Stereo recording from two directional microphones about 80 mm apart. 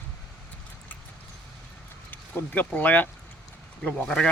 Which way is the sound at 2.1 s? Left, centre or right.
Left.